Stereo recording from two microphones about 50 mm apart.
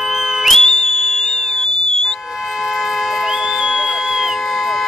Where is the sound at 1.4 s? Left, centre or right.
Centre.